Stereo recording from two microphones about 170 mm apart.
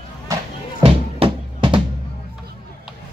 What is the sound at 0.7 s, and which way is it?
Music, 30° right (ahead or behind).